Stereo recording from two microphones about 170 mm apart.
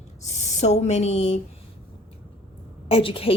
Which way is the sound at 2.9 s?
30° left (ahead or behind).